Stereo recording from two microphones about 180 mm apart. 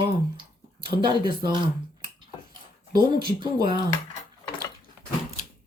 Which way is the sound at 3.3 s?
25° right (ahead or behind).